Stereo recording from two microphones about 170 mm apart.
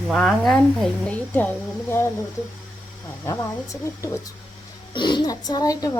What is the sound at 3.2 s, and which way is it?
Speech, 20° left (ahead or behind).